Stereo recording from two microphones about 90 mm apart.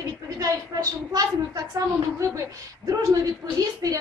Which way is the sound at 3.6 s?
40° right (ahead or behind).